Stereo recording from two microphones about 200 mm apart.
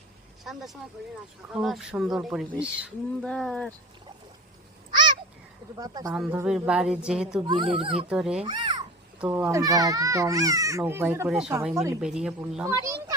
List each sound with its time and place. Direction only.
0.4 s speech: centre (ahead or behind)
5.7 s speech: 20° right (ahead or behind)
6.1 s speech: 5° right (ahead or behind)
7.4 s speech: 25° right (ahead or behind)
8.1 s speech: 5° right (ahead or behind)
8.4 s a child's voice: 25° right (ahead or behind)
9.1 s speech: 10° right (ahead or behind)
11.5 s speech: 15° right (ahead or behind)
11.9 s speech: 5° right (ahead or behind)
12.6 s a child's voice: 15° right (ahead or behind)